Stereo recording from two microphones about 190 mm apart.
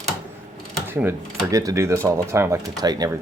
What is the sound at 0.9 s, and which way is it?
Speech, 10° right (ahead or behind).